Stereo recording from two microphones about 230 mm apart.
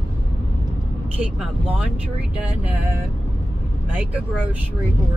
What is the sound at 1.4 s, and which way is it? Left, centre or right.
Speech, centre.